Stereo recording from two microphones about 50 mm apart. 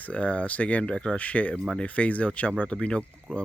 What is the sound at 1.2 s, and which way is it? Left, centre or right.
Speech, left.